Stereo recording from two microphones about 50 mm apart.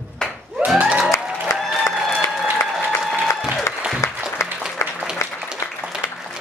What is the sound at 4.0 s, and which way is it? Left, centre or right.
Applause, left.